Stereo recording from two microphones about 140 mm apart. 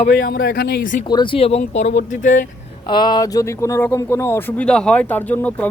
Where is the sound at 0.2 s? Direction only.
90° left.